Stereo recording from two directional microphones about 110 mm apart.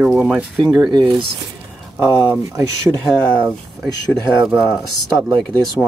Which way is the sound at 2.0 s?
25° right (ahead or behind).